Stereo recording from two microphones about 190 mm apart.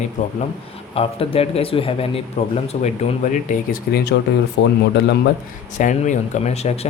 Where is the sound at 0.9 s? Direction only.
30° left (ahead or behind).